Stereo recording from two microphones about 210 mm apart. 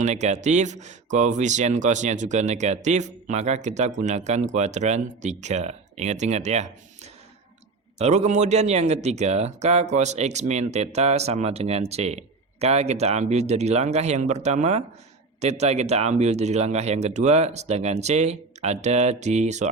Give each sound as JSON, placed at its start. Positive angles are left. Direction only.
{"t": 0.0, "sound": "speech", "side_deg": -35}